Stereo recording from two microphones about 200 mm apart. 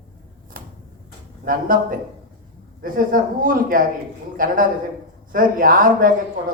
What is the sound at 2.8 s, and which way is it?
A man's voice, 45° right (ahead or behind).